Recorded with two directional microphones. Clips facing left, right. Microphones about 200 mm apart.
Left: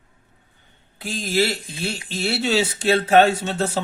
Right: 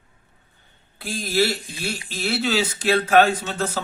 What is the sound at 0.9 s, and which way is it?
A man's voice, 20° left (ahead or behind).